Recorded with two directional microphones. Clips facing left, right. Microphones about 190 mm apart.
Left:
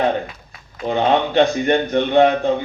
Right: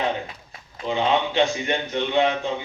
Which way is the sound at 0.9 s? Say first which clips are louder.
Left 5 dB; 55° left (ahead or behind).